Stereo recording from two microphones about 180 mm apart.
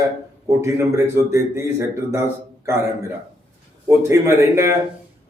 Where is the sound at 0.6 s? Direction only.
15° right (ahead or behind).